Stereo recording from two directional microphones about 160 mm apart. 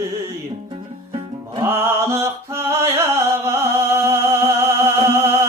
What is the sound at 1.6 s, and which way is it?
Music, 15° right (ahead or behind).